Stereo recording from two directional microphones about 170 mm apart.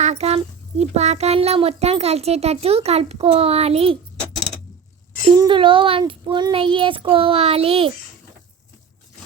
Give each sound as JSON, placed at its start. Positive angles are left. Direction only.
{"t": 0.0, "sound": "a child's voice", "side_deg": -40}
{"t": 5.4, "sound": "a child's voice", "side_deg": -30}